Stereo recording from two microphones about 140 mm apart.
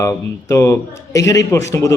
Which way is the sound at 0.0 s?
20° left (ahead or behind).